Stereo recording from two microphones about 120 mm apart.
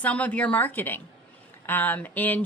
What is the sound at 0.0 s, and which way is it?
Speech, 10° left (ahead or behind).